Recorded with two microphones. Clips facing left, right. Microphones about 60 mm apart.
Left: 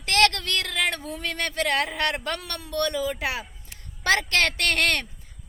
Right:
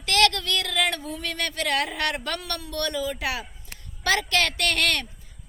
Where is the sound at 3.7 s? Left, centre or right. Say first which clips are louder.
Right 3 dB; right.